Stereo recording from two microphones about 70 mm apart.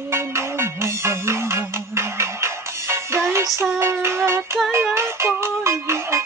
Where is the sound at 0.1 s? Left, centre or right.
Right.